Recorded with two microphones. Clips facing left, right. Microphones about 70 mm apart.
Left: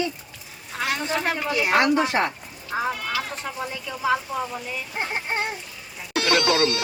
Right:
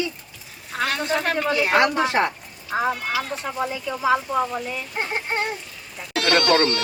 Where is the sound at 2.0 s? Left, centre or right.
Right.